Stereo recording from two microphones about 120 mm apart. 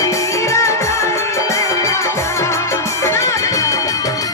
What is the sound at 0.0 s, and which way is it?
Music, 25° left (ahead or behind).